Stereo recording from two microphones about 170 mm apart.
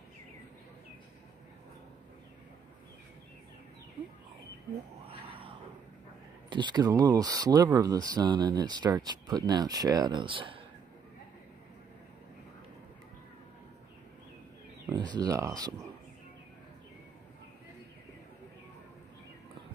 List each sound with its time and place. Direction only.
5.0 s a sound: 30° right (ahead or behind)
6.5 s speech: 25° right (ahead or behind)
14.9 s speech: 25° right (ahead or behind)